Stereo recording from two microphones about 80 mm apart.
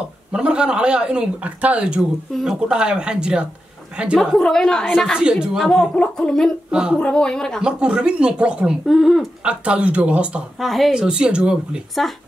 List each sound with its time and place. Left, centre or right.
0.3 s a man's voice: centre
4.2 s speech: centre
4.9 s a man's voice: centre
5.6 s speech: centre
6.7 s speech: centre
7.0 s speech: centre
7.6 s a man's voice: centre
10.6 s a man's voice: centre